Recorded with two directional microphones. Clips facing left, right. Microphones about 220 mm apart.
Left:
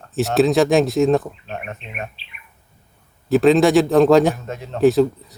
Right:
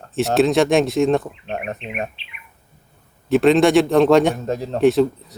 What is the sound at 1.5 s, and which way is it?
Speech, 40° right (ahead or behind).